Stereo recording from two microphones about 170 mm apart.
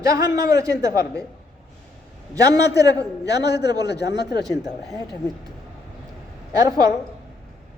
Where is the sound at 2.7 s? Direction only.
20° right (ahead or behind).